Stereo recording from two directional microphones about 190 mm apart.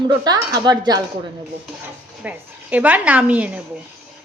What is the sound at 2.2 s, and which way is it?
A woman's voice, 10° right (ahead or behind).